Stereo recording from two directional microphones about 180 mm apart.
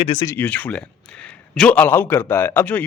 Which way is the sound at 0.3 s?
10° left (ahead or behind).